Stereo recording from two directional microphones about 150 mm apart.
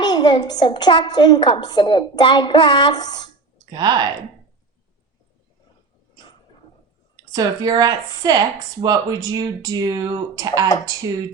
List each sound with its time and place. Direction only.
0.0 s a woman's voice: 30° left (ahead or behind)
3.7 s speech: 25° right (ahead or behind)
7.3 s speech: 25° right (ahead or behind)